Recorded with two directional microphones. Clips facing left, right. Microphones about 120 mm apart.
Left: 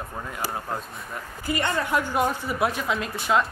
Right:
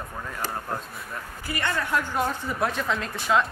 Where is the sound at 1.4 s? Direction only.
20° left (ahead or behind).